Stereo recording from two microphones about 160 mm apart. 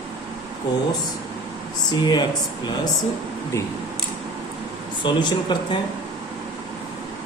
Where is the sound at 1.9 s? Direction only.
25° left (ahead or behind).